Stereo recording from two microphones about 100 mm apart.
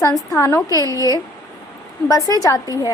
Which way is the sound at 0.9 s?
35° right (ahead or behind).